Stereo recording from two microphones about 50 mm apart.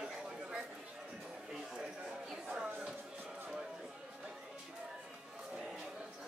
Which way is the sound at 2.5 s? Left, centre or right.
Centre.